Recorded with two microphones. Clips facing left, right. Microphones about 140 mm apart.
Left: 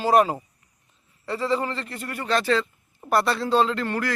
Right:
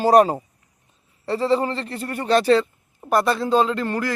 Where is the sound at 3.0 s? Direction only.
15° right (ahead or behind).